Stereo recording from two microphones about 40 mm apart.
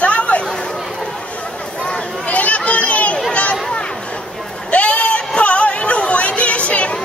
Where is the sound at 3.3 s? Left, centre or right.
Left.